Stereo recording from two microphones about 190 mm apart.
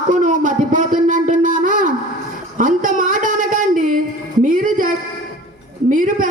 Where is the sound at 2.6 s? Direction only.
45° right (ahead or behind).